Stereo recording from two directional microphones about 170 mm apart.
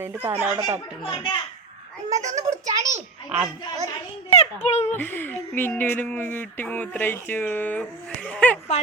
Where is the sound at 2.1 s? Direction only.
45° right (ahead or behind).